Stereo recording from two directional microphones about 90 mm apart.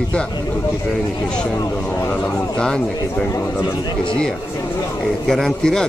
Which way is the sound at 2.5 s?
10° left (ahead or behind).